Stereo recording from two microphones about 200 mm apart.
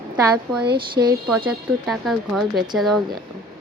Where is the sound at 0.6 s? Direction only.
50° right (ahead or behind).